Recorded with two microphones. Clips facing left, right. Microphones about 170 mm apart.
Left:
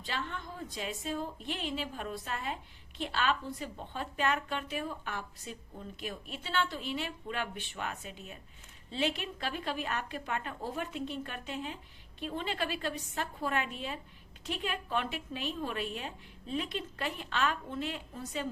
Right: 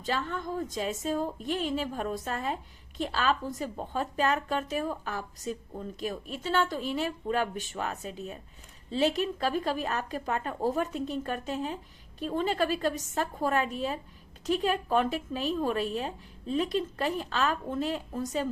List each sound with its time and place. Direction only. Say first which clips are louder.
0.0 s a woman's voice: right 7 dB; 40° right (ahead or behind)